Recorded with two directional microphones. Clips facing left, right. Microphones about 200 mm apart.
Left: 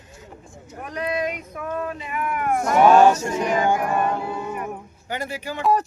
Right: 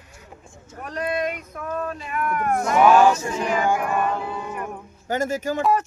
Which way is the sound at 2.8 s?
35° left (ahead or behind).